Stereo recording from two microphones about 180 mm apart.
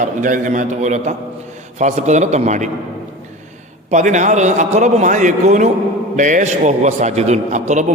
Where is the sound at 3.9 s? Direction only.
40° right (ahead or behind).